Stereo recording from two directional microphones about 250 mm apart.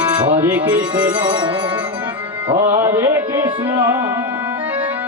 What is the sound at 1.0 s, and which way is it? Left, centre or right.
Music, centre.